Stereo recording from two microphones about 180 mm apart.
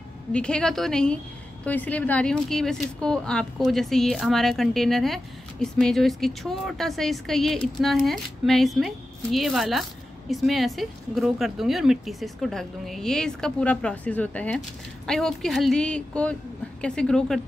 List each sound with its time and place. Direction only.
0.3 s a woman's voice: 5° left (ahead or behind)